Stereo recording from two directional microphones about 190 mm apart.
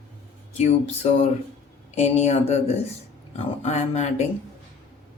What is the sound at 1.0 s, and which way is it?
Speech, 35° left (ahead or behind).